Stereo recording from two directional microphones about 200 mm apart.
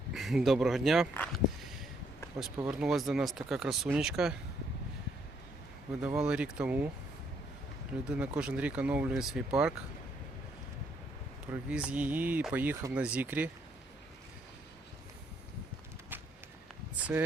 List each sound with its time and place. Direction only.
0.1 s speech: centre (ahead or behind)
1.1 s a sound: 5° left (ahead or behind)
2.6 s speech: 5° right (ahead or behind)
6.0 s speech: 5° right (ahead or behind)
8.0 s speech: 5° right (ahead or behind)
11.7 s speech: 5° right (ahead or behind)
16.9 s rustling leaves: 10° right (ahead or behind)